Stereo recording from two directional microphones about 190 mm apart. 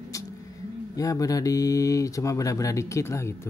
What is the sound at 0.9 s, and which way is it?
Speech, 20° left (ahead or behind).